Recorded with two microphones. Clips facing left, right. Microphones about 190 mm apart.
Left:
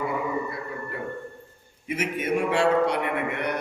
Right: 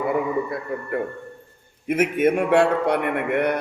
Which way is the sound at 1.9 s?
55° right (ahead or behind).